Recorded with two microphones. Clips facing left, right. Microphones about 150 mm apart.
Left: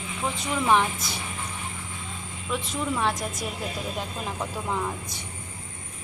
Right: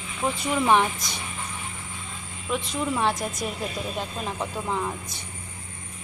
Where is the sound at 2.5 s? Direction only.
Centre (ahead or behind).